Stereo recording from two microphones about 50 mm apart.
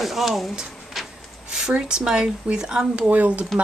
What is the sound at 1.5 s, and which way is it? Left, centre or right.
Speech, centre.